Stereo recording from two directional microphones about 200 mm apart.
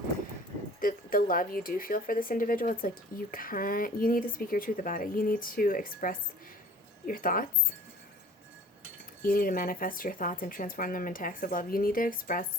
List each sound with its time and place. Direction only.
0.8 s speech: 45° left (ahead or behind)
9.2 s speech: 45° left (ahead or behind)